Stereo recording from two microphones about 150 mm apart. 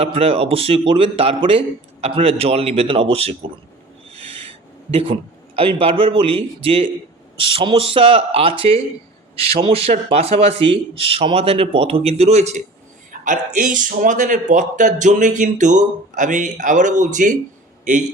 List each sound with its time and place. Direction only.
0.0 s speech: 40° right (ahead or behind)
4.1 s owl: 40° right (ahead or behind)
4.9 s speech: 40° right (ahead or behind)
13.1 s a man's voice: 60° right (ahead or behind)